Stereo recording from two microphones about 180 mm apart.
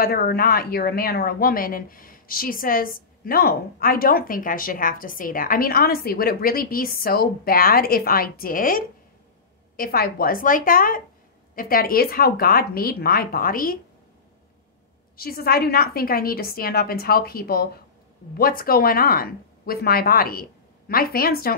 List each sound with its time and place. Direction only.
0.0 s a woman's voice: 55° left (ahead or behind)
15.1 s a woman's voice: 55° left (ahead or behind)